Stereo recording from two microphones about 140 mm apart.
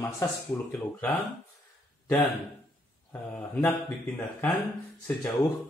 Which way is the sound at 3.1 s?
15° left (ahead or behind).